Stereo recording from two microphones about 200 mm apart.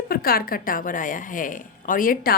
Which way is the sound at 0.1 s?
50° left (ahead or behind).